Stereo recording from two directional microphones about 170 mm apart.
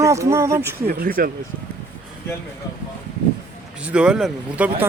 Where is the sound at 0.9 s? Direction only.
60° right (ahead or behind).